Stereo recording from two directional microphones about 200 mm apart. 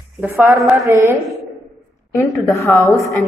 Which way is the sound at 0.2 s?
10° right (ahead or behind).